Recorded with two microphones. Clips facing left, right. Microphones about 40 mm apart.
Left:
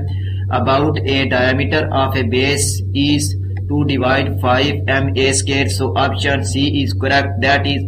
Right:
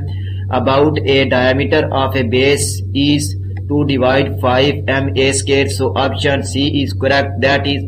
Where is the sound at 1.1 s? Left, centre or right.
Right.